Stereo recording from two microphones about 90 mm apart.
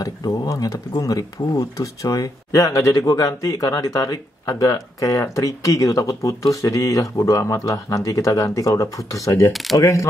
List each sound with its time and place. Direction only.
0.0 s speech: 45° left (ahead or behind)
9.5 s speech: centre (ahead or behind)
9.8 s speech: 35° left (ahead or behind)